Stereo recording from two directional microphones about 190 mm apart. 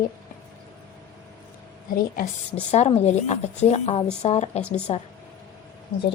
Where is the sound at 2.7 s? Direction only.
35° left (ahead or behind).